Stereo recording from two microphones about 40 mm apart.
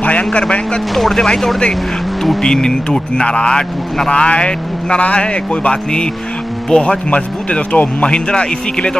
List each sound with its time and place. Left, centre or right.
0.0 s speech: left
0.9 s speech: centre